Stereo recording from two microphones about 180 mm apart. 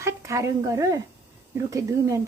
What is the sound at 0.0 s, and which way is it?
A woman's voice, 15° right (ahead or behind).